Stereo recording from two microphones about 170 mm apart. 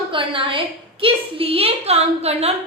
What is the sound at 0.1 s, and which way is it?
A woman's voice, 30° right (ahead or behind).